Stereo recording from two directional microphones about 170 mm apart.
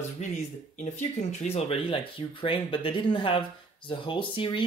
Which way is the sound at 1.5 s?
35° left (ahead or behind).